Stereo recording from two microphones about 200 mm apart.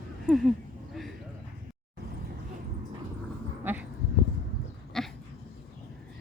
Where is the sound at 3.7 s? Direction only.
10° right (ahead or behind).